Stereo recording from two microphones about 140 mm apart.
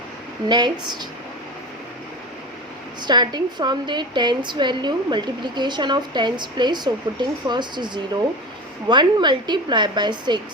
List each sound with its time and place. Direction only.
0.4 s speech: 30° right (ahead or behind)
3.1 s speech: 30° right (ahead or behind)